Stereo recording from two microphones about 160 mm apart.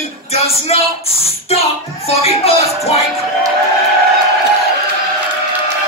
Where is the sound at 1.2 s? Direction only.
40° left (ahead or behind).